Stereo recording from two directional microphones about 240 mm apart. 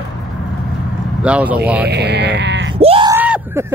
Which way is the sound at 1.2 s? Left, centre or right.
Centre.